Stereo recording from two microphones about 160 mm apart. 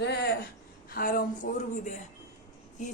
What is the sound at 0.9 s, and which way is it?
A woman's voice, 65° left (ahead or behind).